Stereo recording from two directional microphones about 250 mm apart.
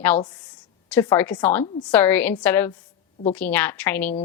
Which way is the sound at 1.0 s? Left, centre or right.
Centre.